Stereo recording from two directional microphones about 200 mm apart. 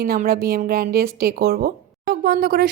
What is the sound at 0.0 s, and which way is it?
A woman's voice, 50° right (ahead or behind).